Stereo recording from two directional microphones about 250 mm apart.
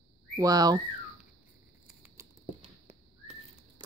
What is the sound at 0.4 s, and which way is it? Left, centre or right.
Speech, centre.